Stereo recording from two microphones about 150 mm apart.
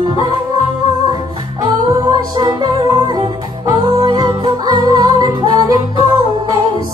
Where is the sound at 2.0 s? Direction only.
25° right (ahead or behind).